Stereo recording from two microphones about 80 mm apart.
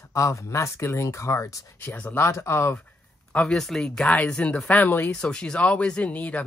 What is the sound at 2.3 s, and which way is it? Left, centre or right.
Speech, left.